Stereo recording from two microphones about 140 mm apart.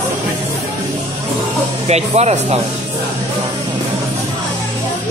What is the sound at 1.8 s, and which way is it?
Speech, 50° right (ahead or behind).